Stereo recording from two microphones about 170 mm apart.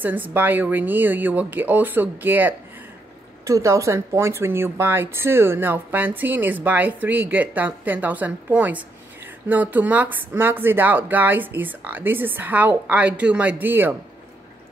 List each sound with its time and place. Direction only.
0.0 s speech: 10° right (ahead or behind)